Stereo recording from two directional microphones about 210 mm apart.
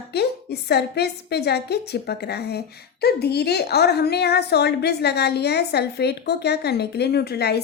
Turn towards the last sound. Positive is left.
turn(degrees=50)  # may be behind; listen again after turning